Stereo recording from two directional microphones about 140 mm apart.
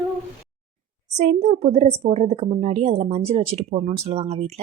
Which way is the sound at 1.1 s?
55° right (ahead or behind).